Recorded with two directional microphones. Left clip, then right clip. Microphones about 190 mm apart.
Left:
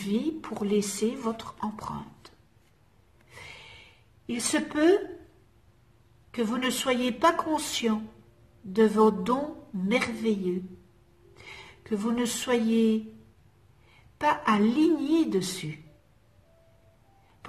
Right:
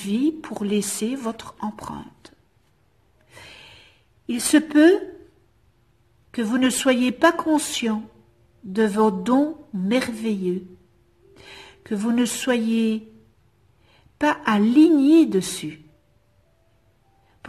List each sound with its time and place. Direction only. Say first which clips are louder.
0.1 s a woman's voice: right 7 dB; 50° right (ahead or behind)
3.3 s snort: right 2 dB; 50° right (ahead or behind)
4.3 s a woman's voice: right 9 dB; 50° right (ahead or behind)
6.3 s a woman's voice: right 6 dB; 50° right (ahead or behind)
14.2 s a woman's voice: right 4 dB; 50° right (ahead or behind)